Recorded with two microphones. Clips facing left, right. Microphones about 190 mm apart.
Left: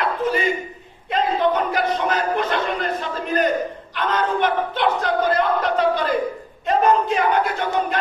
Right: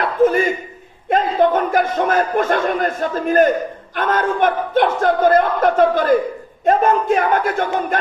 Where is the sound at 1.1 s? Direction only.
50° right (ahead or behind).